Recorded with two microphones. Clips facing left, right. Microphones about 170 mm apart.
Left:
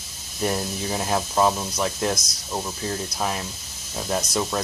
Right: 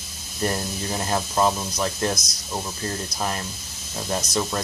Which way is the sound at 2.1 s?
30° left (ahead or behind).